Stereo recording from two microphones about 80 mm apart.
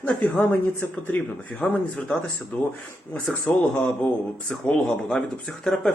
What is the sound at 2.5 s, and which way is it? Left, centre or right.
Speech, left.